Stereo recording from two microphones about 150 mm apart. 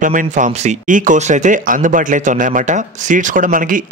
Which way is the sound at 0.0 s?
60° right (ahead or behind).